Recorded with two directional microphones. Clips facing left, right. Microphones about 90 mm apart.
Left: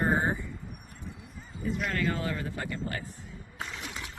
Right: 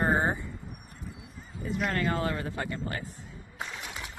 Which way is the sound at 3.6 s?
5° right (ahead or behind).